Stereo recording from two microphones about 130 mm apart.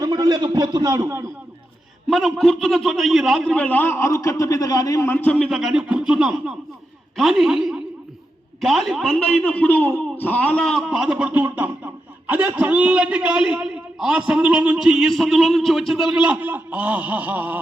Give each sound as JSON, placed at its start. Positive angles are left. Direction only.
{"t": 0.0, "sound": "a man's voice", "side_deg": -30}
{"t": 2.0, "sound": "a man's voice", "side_deg": 5}